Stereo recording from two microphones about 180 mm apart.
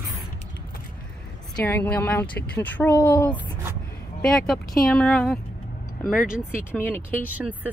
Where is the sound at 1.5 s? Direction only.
10° left (ahead or behind).